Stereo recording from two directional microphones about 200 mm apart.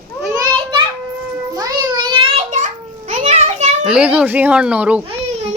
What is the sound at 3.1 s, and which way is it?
Children playing, 35° right (ahead or behind).